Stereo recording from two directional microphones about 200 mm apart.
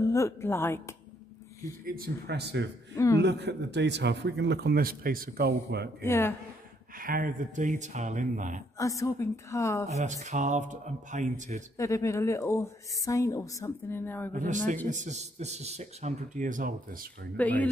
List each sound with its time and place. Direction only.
0.0 s speech: 15° left (ahead or behind)
1.9 s a man's voice: 50° right (ahead or behind)
6.0 s speech: 10° left (ahead or behind)
7.0 s a man's voice: 45° right (ahead or behind)
8.7 s speech: 15° left (ahead or behind)
9.8 s a man's voice: 35° right (ahead or behind)
11.7 s speech: 15° left (ahead or behind)
14.3 s a man's voice: 40° right (ahead or behind)
17.4 s speech: 10° left (ahead or behind)